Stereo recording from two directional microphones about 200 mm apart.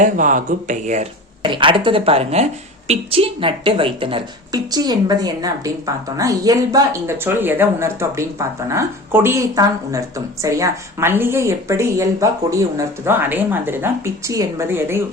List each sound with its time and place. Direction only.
0.0 s speech: 40° right (ahead or behind)
1.5 s a woman's voice: 25° right (ahead or behind)